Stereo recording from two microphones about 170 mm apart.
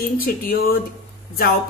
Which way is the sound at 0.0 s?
60° left (ahead or behind).